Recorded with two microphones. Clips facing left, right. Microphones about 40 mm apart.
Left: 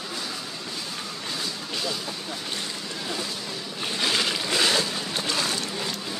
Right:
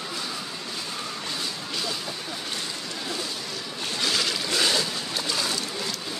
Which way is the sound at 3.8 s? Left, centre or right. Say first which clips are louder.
Left 1 dB; left.